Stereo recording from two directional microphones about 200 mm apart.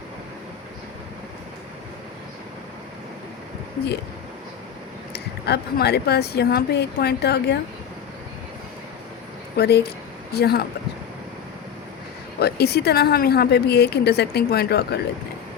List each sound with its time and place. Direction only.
5.1 s a woman's voice: 55° left (ahead or behind)
9.6 s a woman's voice: 55° left (ahead or behind)
12.4 s a woman's voice: 55° left (ahead or behind)